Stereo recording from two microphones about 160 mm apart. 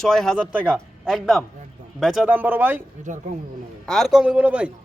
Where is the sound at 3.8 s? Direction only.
Centre (ahead or behind).